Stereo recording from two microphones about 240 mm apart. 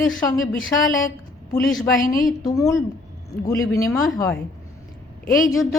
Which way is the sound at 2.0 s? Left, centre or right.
Left.